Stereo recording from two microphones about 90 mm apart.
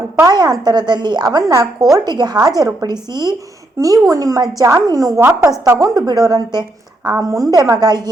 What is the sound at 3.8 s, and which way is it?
A woman's voice, 40° right (ahead or behind).